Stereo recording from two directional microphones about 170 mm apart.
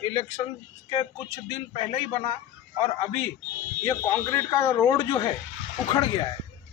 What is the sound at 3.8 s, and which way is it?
Speech, 20° left (ahead or behind).